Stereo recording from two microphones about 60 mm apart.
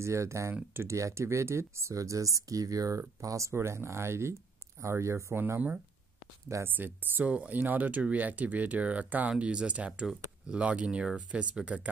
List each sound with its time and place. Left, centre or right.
0.0 s speech: right
3.2 s speech: right
6.6 s speech: right